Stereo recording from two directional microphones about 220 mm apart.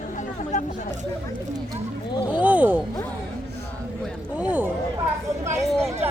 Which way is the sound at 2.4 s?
5° right (ahead or behind).